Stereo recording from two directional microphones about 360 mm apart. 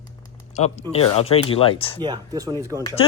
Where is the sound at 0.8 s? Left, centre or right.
Centre.